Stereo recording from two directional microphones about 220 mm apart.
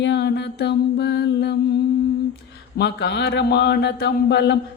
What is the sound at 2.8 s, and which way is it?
A woman's voice, 50° left (ahead or behind).